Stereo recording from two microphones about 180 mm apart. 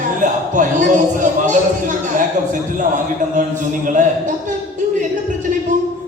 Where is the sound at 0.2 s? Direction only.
45° right (ahead or behind).